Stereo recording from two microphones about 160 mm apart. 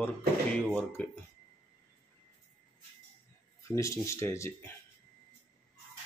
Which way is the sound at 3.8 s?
20° left (ahead or behind).